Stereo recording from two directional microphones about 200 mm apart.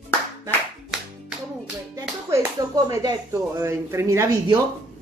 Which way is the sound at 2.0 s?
15° right (ahead or behind).